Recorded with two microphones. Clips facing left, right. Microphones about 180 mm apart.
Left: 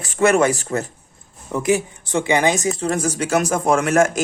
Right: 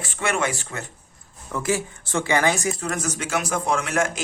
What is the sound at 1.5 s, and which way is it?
A man's voice, 20° left (ahead or behind).